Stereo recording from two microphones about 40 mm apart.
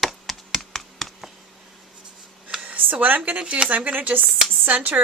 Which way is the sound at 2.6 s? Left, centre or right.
Right.